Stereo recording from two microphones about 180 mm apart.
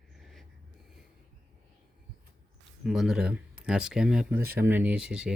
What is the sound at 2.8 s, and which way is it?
Speech, centre (ahead or behind).